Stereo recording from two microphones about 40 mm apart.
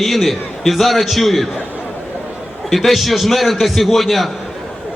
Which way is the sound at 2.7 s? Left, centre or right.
Centre.